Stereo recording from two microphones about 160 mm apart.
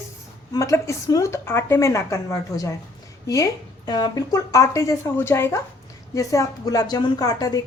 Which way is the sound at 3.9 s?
25° left (ahead or behind).